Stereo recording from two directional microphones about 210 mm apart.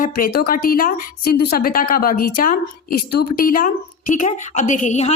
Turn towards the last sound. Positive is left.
turn(degrees=35)  # may be behind; listen again after turning